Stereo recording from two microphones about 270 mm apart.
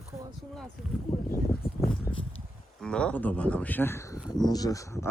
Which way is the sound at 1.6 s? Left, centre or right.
Left.